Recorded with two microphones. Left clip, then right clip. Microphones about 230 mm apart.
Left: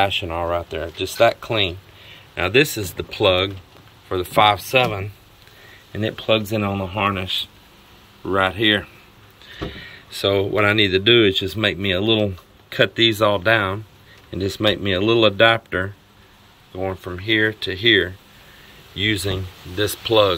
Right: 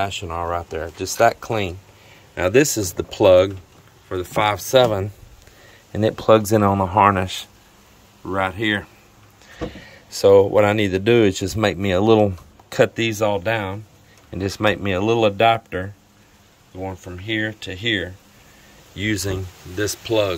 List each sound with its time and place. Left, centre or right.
0.0 s speech: centre
4.1 s speech: centre
4.6 s speech: right
6.4 s speech: centre
8.3 s speech: centre